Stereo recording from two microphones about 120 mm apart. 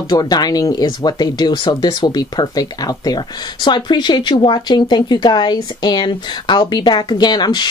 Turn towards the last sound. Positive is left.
turn(degrees=35)  # may be behind; listen again after turning